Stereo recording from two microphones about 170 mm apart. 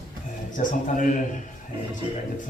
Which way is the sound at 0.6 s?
45° left (ahead or behind).